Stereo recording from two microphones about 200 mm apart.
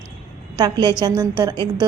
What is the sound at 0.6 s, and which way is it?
Speech, 20° right (ahead or behind).